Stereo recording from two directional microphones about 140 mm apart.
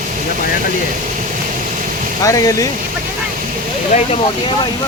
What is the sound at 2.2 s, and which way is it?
Speech, 25° left (ahead or behind).